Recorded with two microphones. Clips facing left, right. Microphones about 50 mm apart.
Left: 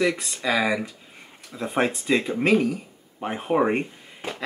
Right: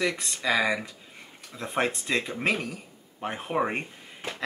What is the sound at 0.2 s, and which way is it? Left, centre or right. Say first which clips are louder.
Speech: left 2 dB; centre.